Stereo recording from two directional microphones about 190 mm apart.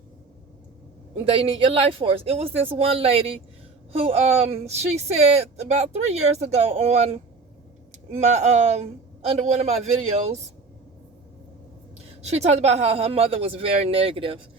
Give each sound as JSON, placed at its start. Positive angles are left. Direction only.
{"t": 1.3, "sound": "speech", "side_deg": -30}
{"t": 12.2, "sound": "speech", "side_deg": -35}